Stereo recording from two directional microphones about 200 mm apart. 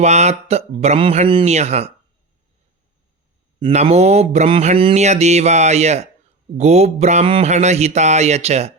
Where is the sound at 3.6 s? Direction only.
25° right (ahead or behind).